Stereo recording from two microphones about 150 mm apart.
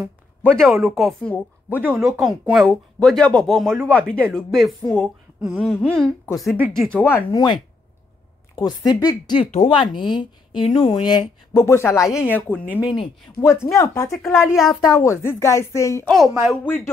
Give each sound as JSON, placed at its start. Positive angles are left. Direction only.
{"t": 0.4, "sound": "speech", "side_deg": 10}
{"t": 1.8, "sound": "speech", "side_deg": -10}
{"t": 7.3, "sound": "speech", "side_deg": 30}
{"t": 14.4, "sound": "speech", "side_deg": 0}
{"t": 14.8, "sound": "speech", "side_deg": 20}
{"t": 16.1, "sound": "speech", "side_deg": 0}
{"t": 16.6, "sound": "speech", "side_deg": 15}